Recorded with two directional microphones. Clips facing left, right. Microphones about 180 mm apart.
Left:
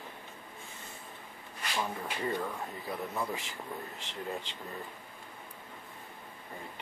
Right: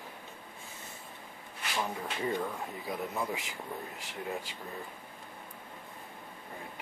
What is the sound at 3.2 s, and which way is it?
Speech, 10° right (ahead or behind).